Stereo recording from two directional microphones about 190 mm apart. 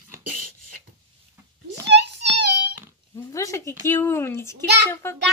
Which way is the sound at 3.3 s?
15° left (ahead or behind).